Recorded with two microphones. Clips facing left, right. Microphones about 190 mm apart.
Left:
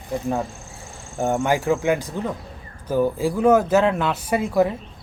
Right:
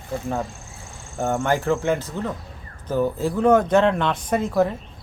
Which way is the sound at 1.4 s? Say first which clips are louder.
Even; 15° left (ahead or behind).